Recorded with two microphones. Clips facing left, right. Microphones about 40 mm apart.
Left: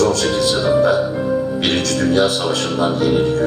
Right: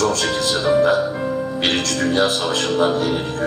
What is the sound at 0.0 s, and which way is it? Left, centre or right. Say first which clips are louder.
Music: left 3 dB; right.